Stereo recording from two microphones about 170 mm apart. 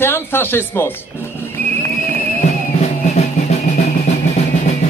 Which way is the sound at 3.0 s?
40° left (ahead or behind).